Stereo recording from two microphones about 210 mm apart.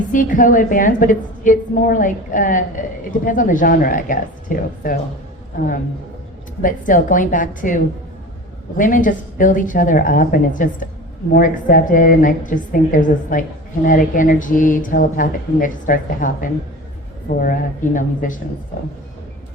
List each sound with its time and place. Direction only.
0.1 s a woman's voice: 40° left (ahead or behind)
8.8 s a woman's voice: 40° left (ahead or behind)